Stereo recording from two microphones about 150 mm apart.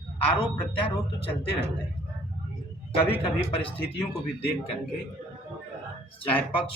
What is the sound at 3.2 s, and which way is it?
Speech, 40° left (ahead or behind).